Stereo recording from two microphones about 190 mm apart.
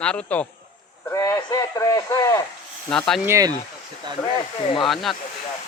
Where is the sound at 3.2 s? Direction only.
15° right (ahead or behind).